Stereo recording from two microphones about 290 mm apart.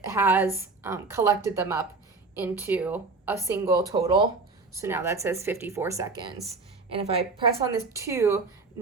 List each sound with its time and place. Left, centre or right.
0.0 s a woman's voice: centre
7.6 s speech: centre